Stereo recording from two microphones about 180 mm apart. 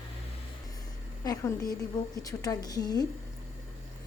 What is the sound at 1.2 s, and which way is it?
A woman's voice, 20° left (ahead or behind).